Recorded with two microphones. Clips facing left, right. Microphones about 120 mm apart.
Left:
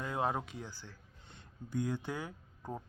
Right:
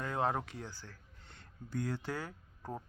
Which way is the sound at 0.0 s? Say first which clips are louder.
Right 1 dB; 15° left (ahead or behind).